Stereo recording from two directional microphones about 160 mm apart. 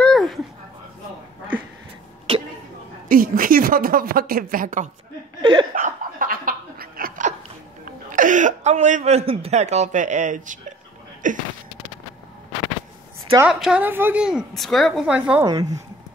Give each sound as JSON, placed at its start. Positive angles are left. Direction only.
{"t": 0.0, "sound": "a sound", "side_deg": 0}
{"t": 2.3, "sound": "a sound", "side_deg": -35}
{"t": 3.1, "sound": "a woman's voice", "side_deg": -60}
{"t": 5.4, "sound": "speech", "side_deg": -25}
{"t": 5.8, "sound": "dog", "side_deg": -55}
{"t": 8.1, "sound": "speech", "side_deg": -55}
{"t": 13.4, "sound": "a woman's voice", "side_deg": -5}
{"t": 15.4, "sound": "speech", "side_deg": -25}